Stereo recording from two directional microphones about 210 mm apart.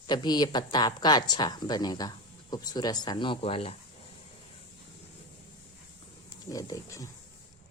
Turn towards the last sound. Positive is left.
turn(degrees=15)  # may be behind; listen again after turning